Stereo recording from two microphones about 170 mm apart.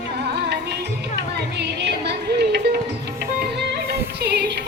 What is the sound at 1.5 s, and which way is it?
Music, 80° right.